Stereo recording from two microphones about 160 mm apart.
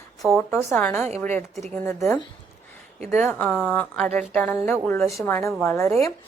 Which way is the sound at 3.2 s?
10° left (ahead or behind).